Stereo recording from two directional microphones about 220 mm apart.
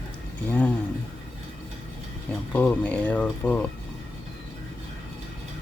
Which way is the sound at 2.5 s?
10° left (ahead or behind).